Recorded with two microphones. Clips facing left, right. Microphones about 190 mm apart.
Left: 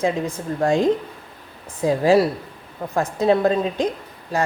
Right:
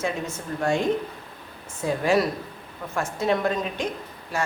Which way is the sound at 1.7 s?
35° left (ahead or behind).